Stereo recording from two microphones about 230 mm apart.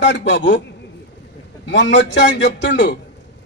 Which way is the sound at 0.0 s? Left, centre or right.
Left.